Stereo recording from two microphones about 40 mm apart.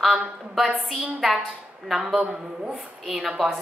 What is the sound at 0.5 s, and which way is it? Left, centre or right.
A woman's voice, centre.